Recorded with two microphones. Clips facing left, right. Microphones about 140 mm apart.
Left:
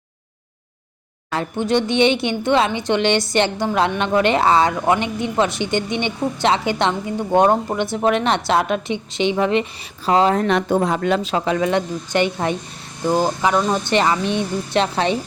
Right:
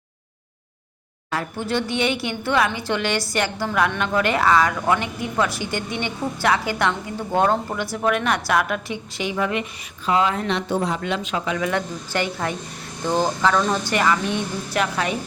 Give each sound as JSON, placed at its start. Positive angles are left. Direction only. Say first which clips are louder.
{"t": 1.4, "sound": "a woman's voice", "louder": "left 6 dB", "side_deg": 20}
{"t": 10.1, "sound": "speech", "louder": "left 5 dB", "side_deg": 40}
{"t": 11.7, "sound": "a woman's voice", "louder": "left 5 dB", "side_deg": 20}
{"t": 13.6, "sound": "a woman's voice", "louder": "left 3 dB", "side_deg": 25}